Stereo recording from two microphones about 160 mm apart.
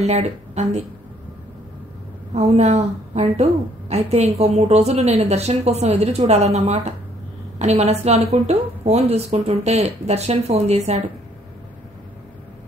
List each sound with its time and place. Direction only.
0.0 s a woman's voice: 45° right (ahead or behind)
2.3 s a woman's voice: 40° right (ahead or behind)